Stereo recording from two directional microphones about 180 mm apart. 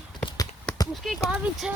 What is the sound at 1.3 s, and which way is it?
Speech, 5° right (ahead or behind).